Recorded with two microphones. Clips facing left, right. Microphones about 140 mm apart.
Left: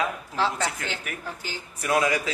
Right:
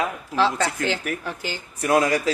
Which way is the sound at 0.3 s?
90° right.